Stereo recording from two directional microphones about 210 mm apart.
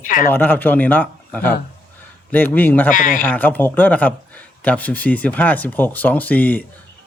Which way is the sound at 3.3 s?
10° left (ahead or behind).